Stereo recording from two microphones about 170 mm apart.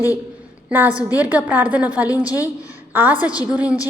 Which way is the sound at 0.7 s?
10° right (ahead or behind).